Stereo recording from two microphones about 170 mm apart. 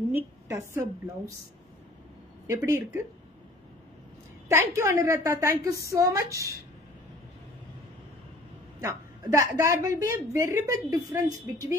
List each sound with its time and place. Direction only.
0.1 s a woman's voice: 15° right (ahead or behind)
2.4 s a woman's voice: 15° right (ahead or behind)
4.5 s a woman's voice: 15° right (ahead or behind)
8.8 s a woman's voice: 15° right (ahead or behind)